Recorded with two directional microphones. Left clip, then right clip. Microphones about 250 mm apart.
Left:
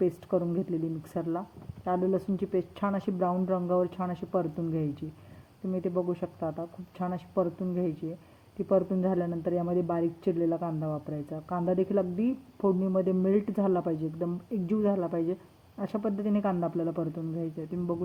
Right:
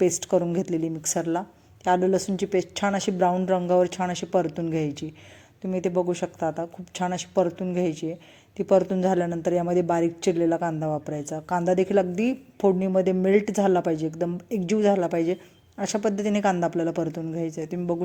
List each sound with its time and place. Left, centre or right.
0.2 s a woman's voice: centre